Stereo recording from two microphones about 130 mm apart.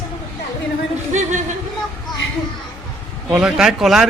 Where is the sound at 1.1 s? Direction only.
65° right (ahead or behind).